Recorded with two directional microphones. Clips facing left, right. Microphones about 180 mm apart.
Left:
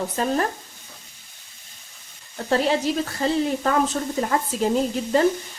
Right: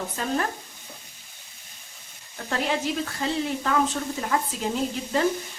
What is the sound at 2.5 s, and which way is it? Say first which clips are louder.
A woman's voice: left 6 dB; 35° left (ahead or behind).